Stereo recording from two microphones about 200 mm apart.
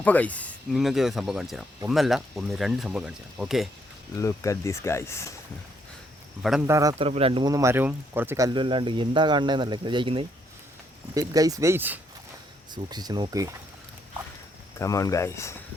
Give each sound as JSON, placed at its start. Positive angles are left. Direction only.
{"t": 0.0, "sound": "speech", "side_deg": 10}
{"t": 4.1, "sound": "speech", "side_deg": 15}
{"t": 6.7, "sound": "speech", "side_deg": -15}
{"t": 7.0, "sound": "speech", "side_deg": -30}
{"t": 14.8, "sound": "speech", "side_deg": 15}